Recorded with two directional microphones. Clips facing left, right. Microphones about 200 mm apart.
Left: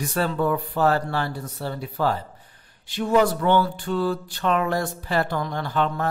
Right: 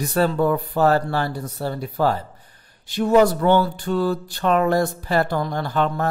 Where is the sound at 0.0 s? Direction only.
40° right (ahead or behind).